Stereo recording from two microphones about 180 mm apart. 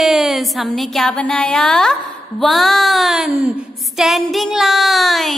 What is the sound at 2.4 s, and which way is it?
A woman's voice, centre (ahead or behind).